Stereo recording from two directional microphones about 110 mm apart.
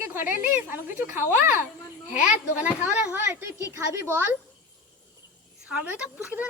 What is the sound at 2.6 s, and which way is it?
Speech, 15° right (ahead or behind).